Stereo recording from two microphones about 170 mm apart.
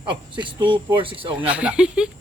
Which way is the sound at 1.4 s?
5° right (ahead or behind).